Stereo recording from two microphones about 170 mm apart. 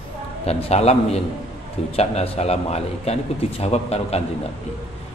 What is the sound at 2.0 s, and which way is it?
A man's voice, 40° left (ahead or behind).